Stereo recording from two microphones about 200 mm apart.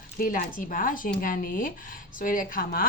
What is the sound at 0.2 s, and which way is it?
A woman's voice, 45° left (ahead or behind).